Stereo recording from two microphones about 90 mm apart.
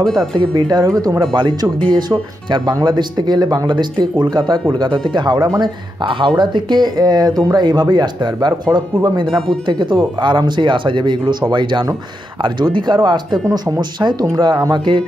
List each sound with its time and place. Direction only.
0.0 s speech: 5° left (ahead or behind)
0.4 s speech: 55° right (ahead or behind)
0.8 s speech: 40° right (ahead or behind)
1.2 s speech: 55° right (ahead or behind)